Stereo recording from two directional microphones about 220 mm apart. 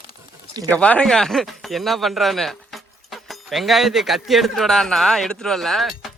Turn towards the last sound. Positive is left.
turn(degrees=0)  # may be behind; listen again after turning